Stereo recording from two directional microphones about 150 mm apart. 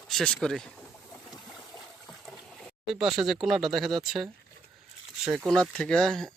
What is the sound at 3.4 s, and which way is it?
Speech, centre (ahead or behind).